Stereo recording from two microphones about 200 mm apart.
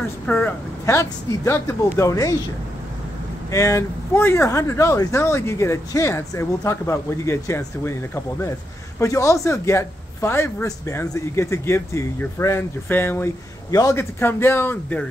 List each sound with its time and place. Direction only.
0.0 s speech: 10° left (ahead or behind)
3.5 s speech: 15° left (ahead or behind)